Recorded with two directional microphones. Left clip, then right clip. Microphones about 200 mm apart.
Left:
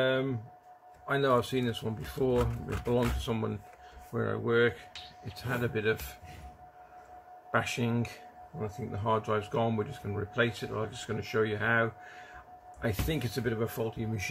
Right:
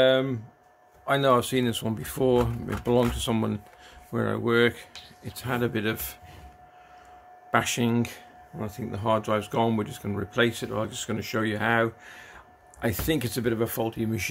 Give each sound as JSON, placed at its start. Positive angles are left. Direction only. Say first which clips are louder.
{"t": 0.0, "sound": "speech", "louder": "right 8 dB", "side_deg": -65}
{"t": 7.5, "sound": "speech", "louder": "right 6 dB", "side_deg": -60}